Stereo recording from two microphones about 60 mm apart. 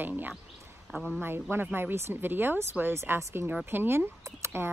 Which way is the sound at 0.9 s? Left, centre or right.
Centre.